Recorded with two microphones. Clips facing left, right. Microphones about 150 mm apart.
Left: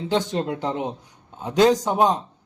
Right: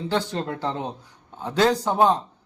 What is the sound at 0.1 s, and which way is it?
A man's voice, 20° left (ahead or behind).